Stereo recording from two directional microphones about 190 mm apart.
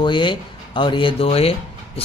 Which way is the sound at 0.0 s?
25° left (ahead or behind).